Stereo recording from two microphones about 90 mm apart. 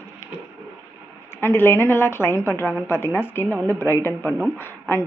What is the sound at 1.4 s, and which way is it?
Speech, 25° left (ahead or behind).